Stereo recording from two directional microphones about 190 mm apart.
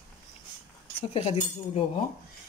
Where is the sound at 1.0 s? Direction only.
35° left (ahead or behind).